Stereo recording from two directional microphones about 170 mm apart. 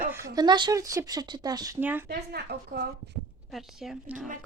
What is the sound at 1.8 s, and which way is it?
Speech, 10° right (ahead or behind).